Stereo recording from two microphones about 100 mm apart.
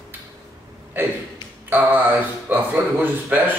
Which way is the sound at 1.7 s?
20° right (ahead or behind).